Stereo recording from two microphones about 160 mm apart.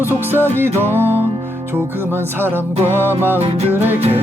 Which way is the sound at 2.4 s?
15° right (ahead or behind).